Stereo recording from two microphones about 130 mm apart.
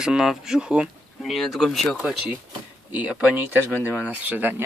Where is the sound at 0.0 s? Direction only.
5° right (ahead or behind).